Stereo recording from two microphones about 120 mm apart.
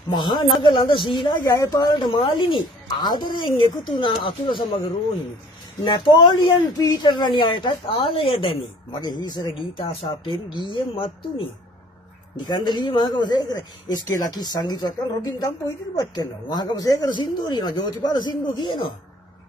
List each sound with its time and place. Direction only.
0.1 s speech: 40° left (ahead or behind)
1.4 s speech: 30° left (ahead or behind); by 4.6 s 45° left (ahead or behind)
5.9 s speech: 45° left (ahead or behind)
9.0 s speech: 35° left (ahead or behind)